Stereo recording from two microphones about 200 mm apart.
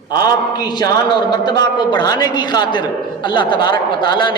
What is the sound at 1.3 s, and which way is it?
A man's voice, 20° left (ahead or behind).